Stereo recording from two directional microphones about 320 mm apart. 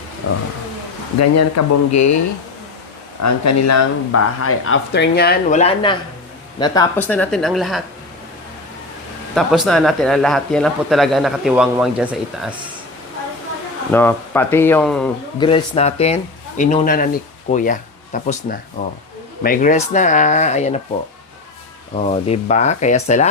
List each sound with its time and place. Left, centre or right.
0.2 s speech: left
1.2 s speech: left
3.2 s speech: left; by 7.8 s centre
9.3 s speech: centre
13.9 s speech: centre
15.4 s speech: centre
21.9 s speech: centre